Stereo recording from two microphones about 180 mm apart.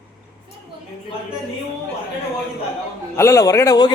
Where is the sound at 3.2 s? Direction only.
15° left (ahead or behind).